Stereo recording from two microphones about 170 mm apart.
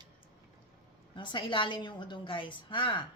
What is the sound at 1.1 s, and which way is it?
A woman's voice, 30° left (ahead or behind).